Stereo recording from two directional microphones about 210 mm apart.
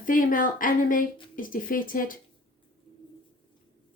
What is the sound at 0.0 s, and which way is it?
Speech, 40° left (ahead or behind).